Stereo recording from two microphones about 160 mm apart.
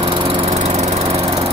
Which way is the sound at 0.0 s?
35° right (ahead or behind).